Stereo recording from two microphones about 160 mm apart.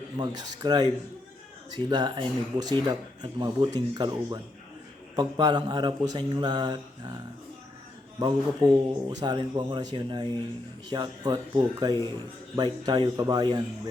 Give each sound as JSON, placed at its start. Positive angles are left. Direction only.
{"t": 0.2, "sound": "speech", "side_deg": -25}
{"t": 8.2, "sound": "speech", "side_deg": -25}